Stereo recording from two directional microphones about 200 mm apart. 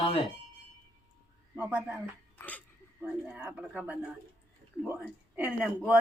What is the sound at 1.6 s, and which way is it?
Speech, 10° right (ahead or behind).